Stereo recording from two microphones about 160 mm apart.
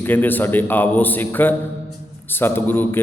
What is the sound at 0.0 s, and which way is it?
A man's voice, 10° left (ahead or behind).